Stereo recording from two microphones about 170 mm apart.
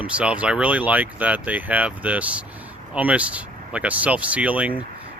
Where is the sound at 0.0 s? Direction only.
5° right (ahead or behind).